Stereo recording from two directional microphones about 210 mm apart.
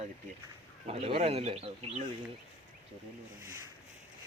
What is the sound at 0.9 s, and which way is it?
Speech, 30° right (ahead or behind).